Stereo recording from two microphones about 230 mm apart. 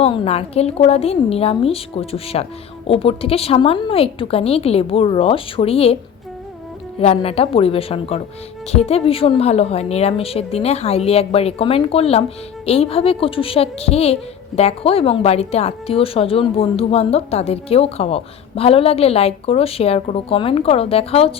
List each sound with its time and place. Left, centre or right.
0.0 s a woman's voice: left
7.0 s a woman's voice: left